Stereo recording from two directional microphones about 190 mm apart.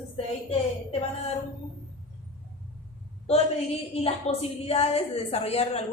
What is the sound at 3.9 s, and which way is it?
A woman's voice, 30° left (ahead or behind).